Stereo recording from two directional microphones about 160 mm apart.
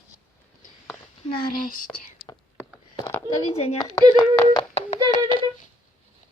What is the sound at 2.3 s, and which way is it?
Whispering, 25° left (ahead or behind).